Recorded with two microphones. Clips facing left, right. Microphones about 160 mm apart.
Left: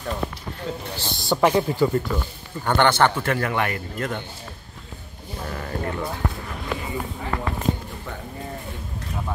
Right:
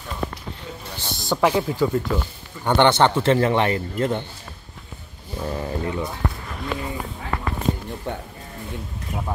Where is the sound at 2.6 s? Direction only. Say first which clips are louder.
Right 2 dB; 20° right (ahead or behind).